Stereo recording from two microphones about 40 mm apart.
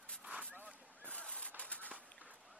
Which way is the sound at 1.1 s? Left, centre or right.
Left.